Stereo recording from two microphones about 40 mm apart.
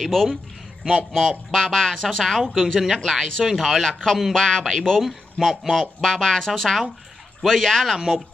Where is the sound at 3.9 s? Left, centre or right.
Centre.